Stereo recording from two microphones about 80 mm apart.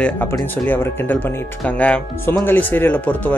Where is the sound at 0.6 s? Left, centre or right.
Left.